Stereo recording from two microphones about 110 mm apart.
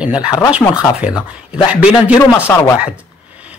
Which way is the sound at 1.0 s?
5° right (ahead or behind).